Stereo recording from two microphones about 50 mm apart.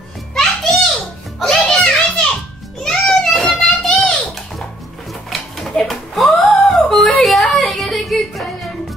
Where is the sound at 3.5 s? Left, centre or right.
Centre.